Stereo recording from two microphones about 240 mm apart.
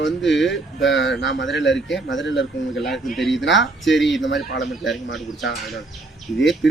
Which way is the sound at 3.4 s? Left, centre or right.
Left.